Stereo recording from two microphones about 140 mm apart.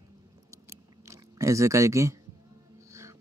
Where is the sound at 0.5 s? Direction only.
20° right (ahead or behind).